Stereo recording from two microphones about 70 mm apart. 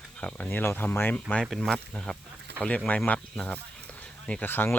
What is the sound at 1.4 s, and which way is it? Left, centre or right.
Speech, centre.